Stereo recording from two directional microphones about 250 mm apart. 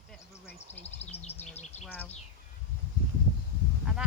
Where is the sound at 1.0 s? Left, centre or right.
Left.